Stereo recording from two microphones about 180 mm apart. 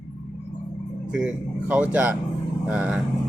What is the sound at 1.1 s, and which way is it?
Speech, 5° right (ahead or behind).